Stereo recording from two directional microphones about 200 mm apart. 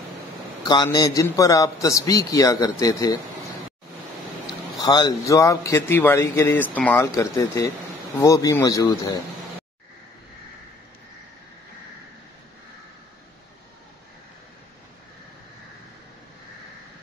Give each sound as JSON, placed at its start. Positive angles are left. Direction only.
{"t": 0.7, "sound": "a man's voice", "side_deg": 20}
{"t": 4.7, "sound": "a man's voice", "side_deg": 20}